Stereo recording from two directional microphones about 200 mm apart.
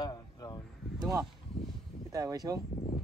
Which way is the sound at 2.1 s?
15° right (ahead or behind).